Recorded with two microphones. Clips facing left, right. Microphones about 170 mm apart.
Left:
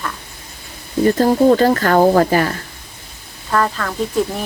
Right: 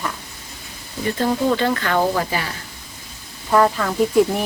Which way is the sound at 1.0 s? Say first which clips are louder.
Left 7 dB; 45° left (ahead or behind).